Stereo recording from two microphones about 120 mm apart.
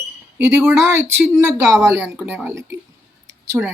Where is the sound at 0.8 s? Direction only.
25° right (ahead or behind).